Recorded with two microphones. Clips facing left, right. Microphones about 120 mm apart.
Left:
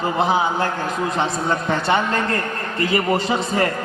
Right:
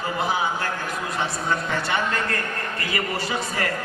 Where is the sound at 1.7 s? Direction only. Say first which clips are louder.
Left 6 dB; 40° left (ahead or behind).